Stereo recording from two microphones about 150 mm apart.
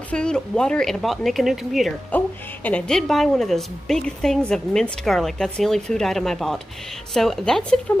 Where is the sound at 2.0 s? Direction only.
10° left (ahead or behind).